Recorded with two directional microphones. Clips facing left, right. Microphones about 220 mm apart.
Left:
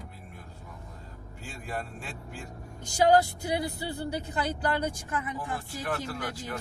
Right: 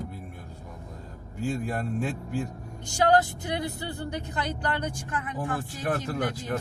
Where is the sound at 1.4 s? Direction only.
45° right (ahead or behind).